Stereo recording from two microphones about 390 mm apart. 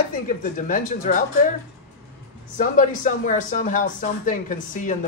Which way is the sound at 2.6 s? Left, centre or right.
Centre.